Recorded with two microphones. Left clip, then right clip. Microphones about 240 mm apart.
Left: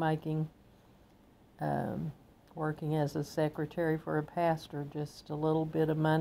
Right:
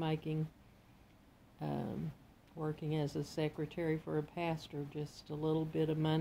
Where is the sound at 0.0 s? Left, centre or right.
Left.